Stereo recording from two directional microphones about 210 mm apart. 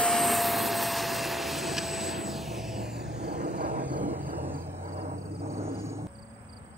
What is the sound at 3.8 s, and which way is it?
Vehicle, 10° right (ahead or behind).